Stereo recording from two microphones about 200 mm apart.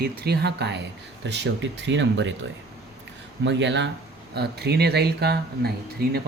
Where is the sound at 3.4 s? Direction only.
60° right (ahead or behind).